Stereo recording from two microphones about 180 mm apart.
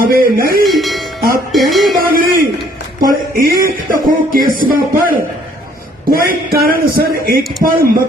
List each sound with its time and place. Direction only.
0.0 s a man's voice: 55° right (ahead or behind)
0.6 s speech: centre (ahead or behind)
2.0 s a sound: 50° right (ahead or behind)
3.0 s a man's voice: 50° right (ahead or behind)